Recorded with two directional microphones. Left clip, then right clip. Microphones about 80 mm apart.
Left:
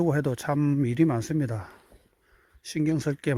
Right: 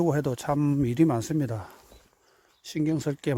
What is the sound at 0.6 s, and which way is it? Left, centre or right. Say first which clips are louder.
Speech: even; right.